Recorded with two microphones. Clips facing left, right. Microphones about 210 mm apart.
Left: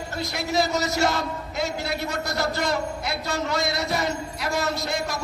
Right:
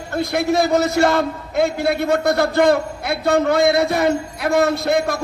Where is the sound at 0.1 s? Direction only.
55° right (ahead or behind).